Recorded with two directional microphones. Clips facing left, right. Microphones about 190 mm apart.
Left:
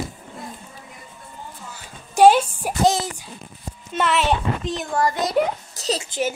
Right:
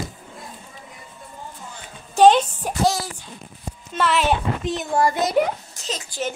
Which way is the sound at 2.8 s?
20° left (ahead or behind).